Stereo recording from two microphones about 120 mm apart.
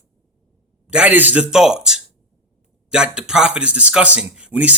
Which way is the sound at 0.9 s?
10° right (ahead or behind).